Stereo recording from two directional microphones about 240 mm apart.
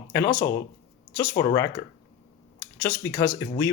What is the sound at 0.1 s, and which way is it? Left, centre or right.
Speech, centre.